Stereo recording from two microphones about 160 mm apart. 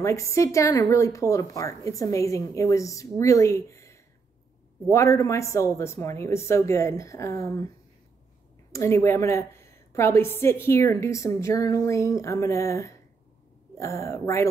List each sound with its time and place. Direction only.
0.0 s a woman's voice: 20° left (ahead or behind)
8.7 s a woman's voice: 20° left (ahead or behind)